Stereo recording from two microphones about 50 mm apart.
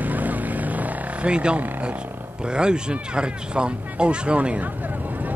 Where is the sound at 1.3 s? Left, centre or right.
Right.